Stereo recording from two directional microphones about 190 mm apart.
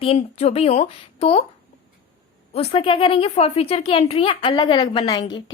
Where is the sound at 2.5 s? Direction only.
30° left (ahead or behind).